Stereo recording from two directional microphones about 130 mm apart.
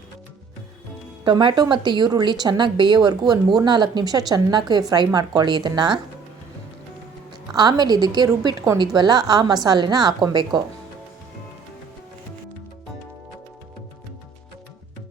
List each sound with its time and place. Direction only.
1.2 s speech: 35° right (ahead or behind)
7.5 s speech: 35° right (ahead or behind)